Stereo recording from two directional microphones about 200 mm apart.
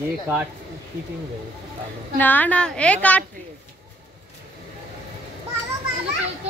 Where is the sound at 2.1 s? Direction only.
10° left (ahead or behind).